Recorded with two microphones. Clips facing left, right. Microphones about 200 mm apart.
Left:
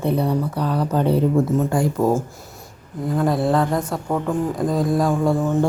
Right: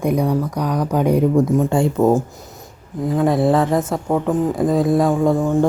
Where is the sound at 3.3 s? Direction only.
20° right (ahead or behind).